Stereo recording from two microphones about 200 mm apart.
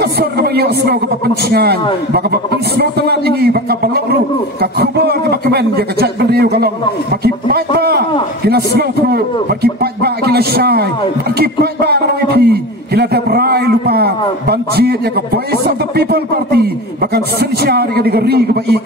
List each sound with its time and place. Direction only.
0.0 s a man's voice: 55° right (ahead or behind)